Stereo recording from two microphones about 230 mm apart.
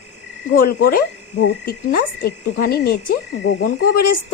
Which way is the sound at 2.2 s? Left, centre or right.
Left.